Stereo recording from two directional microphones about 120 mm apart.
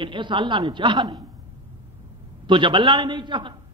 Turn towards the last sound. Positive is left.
turn(degrees=-40)  # may be behind; listen again after turning